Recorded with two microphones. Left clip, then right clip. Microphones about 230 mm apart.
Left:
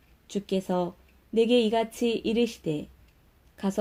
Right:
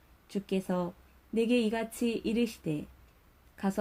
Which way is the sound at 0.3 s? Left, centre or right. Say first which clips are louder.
Left 5 dB; right.